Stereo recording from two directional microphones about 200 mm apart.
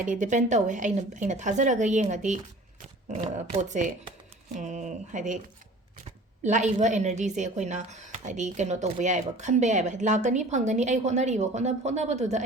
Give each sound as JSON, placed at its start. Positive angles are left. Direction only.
{"t": 0.0, "sound": "speech", "side_deg": -40}
{"t": 6.4, "sound": "speech", "side_deg": -35}